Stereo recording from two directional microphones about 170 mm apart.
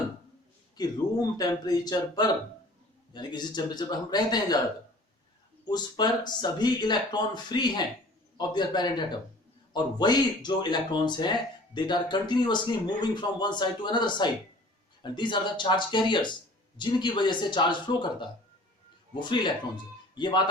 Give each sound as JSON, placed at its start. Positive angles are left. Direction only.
{"t": 0.8, "sound": "speech", "side_deg": 25}
{"t": 5.6, "sound": "speech", "side_deg": 25}